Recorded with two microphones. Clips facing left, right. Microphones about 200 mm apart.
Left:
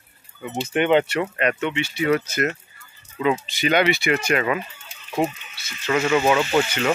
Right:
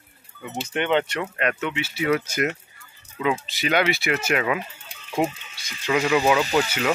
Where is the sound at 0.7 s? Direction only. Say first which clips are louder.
Left 4 dB; 10° left (ahead or behind).